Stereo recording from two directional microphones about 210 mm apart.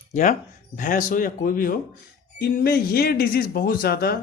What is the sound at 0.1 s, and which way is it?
Speech, 35° left (ahead or behind).